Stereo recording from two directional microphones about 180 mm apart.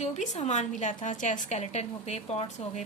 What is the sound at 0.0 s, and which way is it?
A woman's voice, 40° left (ahead or behind).